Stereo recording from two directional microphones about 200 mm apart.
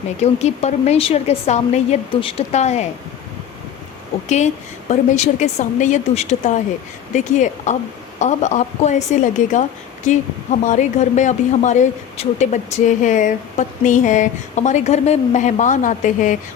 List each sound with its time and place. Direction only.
0.2 s speech: 35° left (ahead or behind)
4.9 s speech: 35° left (ahead or behind)